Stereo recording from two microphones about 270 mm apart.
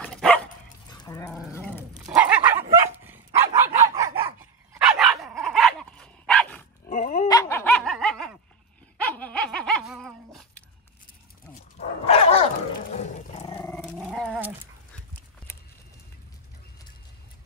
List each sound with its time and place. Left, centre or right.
0.0 s dog: centre
2.0 s dog: centre
6.9 s dog: left
7.2 s dog: centre
12.0 s dog: left
12.9 s roaring cats: left
13.6 s dog: centre